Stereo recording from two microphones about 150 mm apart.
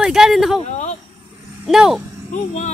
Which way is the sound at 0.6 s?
50° left (ahead or behind).